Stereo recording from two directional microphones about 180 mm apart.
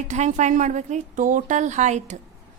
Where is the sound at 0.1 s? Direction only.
40° right (ahead or behind).